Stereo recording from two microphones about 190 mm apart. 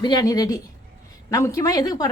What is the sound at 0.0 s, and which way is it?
A woman's voice, 20° left (ahead or behind).